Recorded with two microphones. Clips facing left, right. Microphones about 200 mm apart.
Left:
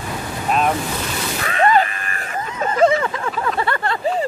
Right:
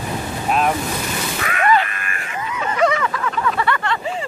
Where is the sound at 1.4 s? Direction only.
30° left (ahead or behind).